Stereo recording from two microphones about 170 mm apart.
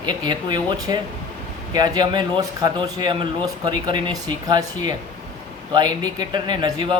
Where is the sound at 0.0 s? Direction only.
25° right (ahead or behind).